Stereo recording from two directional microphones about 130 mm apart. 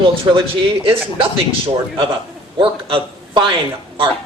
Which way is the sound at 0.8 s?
45° right (ahead or behind).